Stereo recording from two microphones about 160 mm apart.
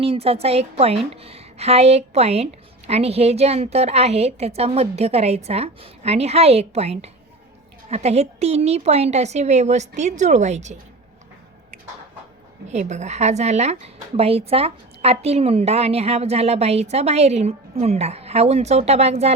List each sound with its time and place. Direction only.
0.0 s a woman's voice: 35° right (ahead or behind)
12.7 s a woman's voice: 45° right (ahead or behind)